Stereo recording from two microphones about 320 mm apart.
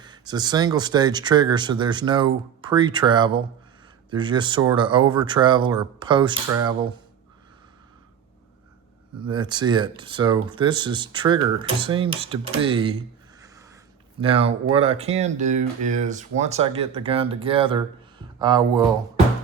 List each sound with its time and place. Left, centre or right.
0.0 s speech: centre
9.2 s speech: centre
14.2 s speech: centre